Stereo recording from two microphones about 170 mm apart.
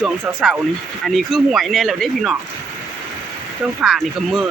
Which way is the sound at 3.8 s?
Centre (ahead or behind).